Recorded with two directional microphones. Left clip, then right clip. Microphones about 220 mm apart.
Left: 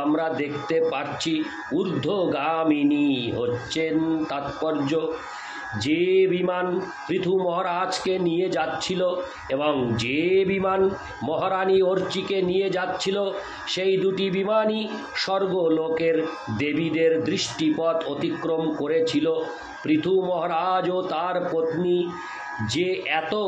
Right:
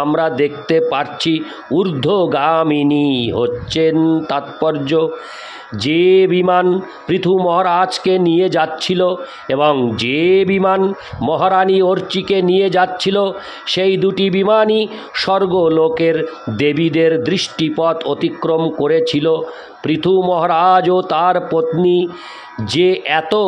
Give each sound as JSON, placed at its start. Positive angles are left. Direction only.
{"t": 0.1, "sound": "a man's voice", "side_deg": -50}
{"t": 22.7, "sound": "a man's voice", "side_deg": -50}